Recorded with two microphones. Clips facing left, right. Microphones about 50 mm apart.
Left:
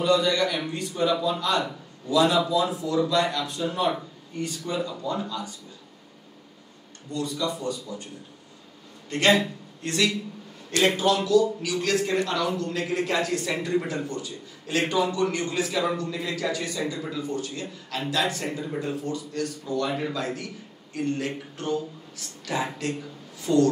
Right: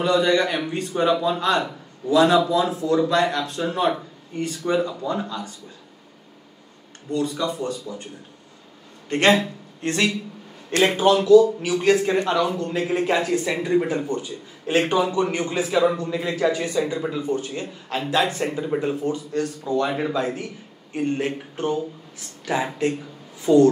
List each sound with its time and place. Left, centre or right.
0.0 s speech: right
4.7 s speech: right
7.1 s speech: right
9.8 s speech: right